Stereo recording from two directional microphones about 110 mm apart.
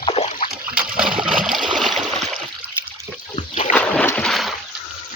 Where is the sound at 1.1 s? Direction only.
50° right (ahead or behind).